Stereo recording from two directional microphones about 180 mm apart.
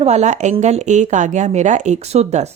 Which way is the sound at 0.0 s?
40° right (ahead or behind).